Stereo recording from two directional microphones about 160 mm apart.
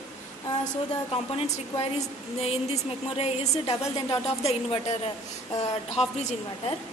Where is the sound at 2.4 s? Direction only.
40° left (ahead or behind).